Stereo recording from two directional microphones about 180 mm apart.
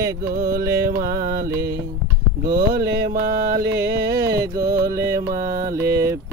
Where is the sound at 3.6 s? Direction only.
15° right (ahead or behind).